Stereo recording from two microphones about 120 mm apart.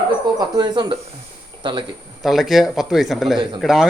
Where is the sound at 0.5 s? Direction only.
40° right (ahead or behind).